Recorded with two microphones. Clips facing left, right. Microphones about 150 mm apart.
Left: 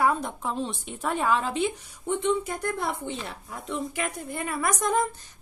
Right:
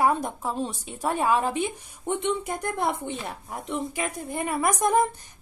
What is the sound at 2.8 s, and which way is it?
Speech, 60° right (ahead or behind).